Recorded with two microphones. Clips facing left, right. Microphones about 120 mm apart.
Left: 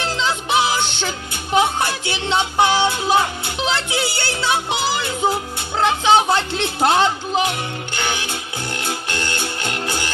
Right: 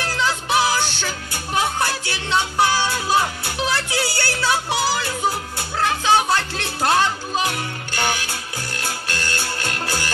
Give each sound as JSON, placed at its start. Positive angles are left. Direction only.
{"t": 0.0, "sound": "music", "side_deg": 20}